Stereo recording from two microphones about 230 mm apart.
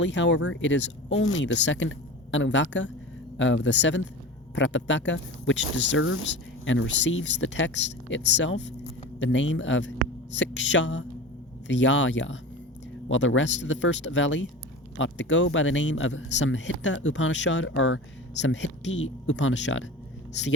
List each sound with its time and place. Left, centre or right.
0.0 s speech: left